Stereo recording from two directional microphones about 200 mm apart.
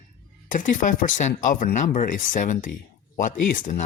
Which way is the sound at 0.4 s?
40° left (ahead or behind).